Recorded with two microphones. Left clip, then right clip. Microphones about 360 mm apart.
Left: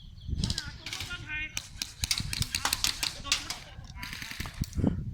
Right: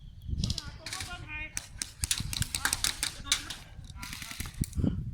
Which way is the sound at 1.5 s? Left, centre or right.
Centre.